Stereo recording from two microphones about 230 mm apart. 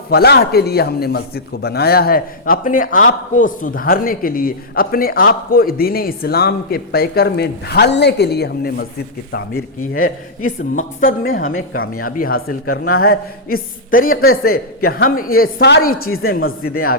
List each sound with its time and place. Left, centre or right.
0.1 s speech: left
10.4 s speech: left